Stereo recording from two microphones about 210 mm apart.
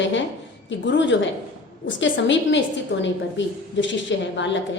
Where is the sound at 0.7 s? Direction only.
60° left (ahead or behind).